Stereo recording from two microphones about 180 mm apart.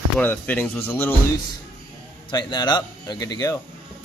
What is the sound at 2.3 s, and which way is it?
Speech, 25° left (ahead or behind).